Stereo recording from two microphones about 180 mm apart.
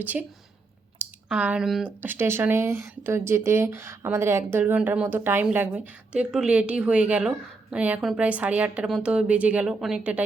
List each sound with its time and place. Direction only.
0.0 s a woman's voice: 10° right (ahead or behind)